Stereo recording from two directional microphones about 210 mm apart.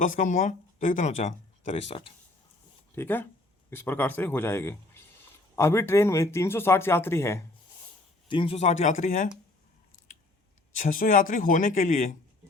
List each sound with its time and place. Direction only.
0.0 s speech: 40° left (ahead or behind)
2.9 s speech: 10° left (ahead or behind)
8.3 s speech: 25° left (ahead or behind)
10.8 s speech: 40° left (ahead or behind)